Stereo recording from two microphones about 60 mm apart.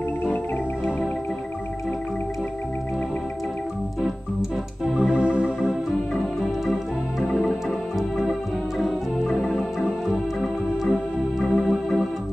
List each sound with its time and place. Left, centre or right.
4.4 s organ: centre
5.1 s music: centre
6.4 s organ: centre
7.2 s music: centre
8.2 s organ: centre
9.8 s music: centre
10.8 s organ: centre